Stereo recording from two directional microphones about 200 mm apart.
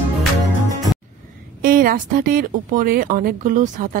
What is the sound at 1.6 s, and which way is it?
Speech, 45° right (ahead or behind).